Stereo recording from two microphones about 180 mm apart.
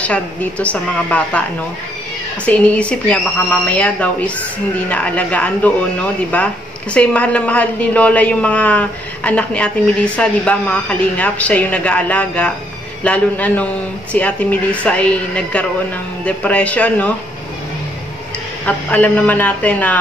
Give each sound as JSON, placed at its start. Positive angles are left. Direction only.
{"t": 0.0, "sound": "a woman's voice", "side_deg": 5}
{"t": 2.4, "sound": "a woman's voice", "side_deg": 5}
{"t": 18.7, "sound": "a woman's voice", "side_deg": 10}